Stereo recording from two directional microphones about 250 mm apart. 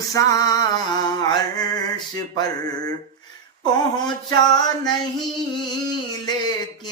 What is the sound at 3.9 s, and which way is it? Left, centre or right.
Music, centre.